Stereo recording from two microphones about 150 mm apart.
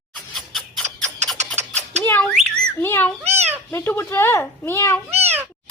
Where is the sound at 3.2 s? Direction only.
45° right (ahead or behind).